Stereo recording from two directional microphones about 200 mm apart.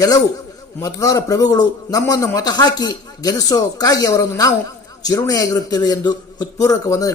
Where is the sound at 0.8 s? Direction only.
15° left (ahead or behind).